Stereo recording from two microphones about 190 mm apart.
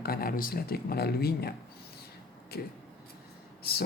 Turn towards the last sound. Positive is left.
turn(degrees=55)  # may be behind; listen again after turning